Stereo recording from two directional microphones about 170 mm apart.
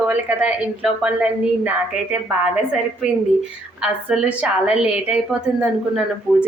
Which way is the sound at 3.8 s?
5° right (ahead or behind).